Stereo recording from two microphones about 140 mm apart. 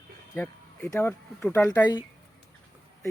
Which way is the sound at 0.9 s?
15° left (ahead or behind).